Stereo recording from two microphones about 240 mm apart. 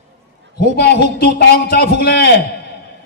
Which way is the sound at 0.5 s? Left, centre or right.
Left.